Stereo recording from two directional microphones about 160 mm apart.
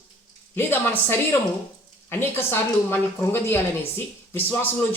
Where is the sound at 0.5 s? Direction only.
15° left (ahead or behind).